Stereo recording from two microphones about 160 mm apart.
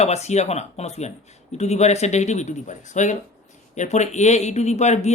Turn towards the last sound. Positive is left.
turn(degrees=45)  # may be behind; listen again after turning